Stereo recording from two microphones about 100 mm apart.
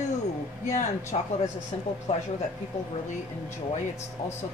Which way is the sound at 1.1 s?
90° left.